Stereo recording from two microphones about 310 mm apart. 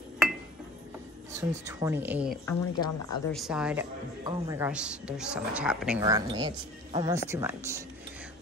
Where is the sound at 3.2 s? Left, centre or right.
Centre.